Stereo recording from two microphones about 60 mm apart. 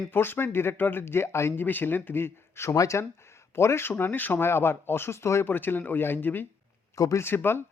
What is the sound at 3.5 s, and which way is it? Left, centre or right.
Speech, left.